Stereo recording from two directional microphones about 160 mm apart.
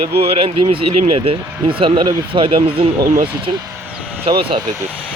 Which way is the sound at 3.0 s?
65° right (ahead or behind).